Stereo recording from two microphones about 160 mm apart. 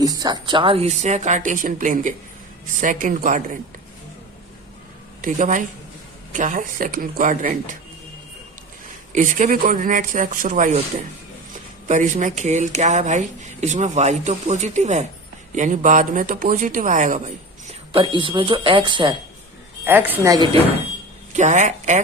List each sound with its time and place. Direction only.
0.0 s speech: 25° right (ahead or behind); by 3.6 s 55° right (ahead or behind)
5.2 s speech: 50° right (ahead or behind)
9.1 s speech: 50° right (ahead or behind)
11.9 s speech: 50° right (ahead or behind)
17.9 s speech: 30° right (ahead or behind)
19.8 s a woman's voice: 10° right (ahead or behind)
20.3 s speech: 25° right (ahead or behind)
21.3 s speech: 50° right (ahead or behind)